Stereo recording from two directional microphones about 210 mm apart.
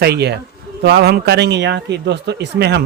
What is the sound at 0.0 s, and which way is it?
Speech, 50° right (ahead or behind).